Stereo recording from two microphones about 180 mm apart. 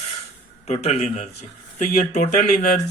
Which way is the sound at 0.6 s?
35° left (ahead or behind).